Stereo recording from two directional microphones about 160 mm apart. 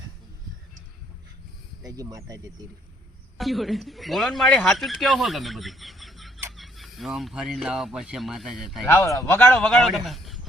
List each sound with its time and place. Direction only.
1.8 s speech: 20° right (ahead or behind)
3.3 s a man's voice: centre (ahead or behind)
8.9 s a man's voice: 15° left (ahead or behind); by 10.4 s centre (ahead or behind)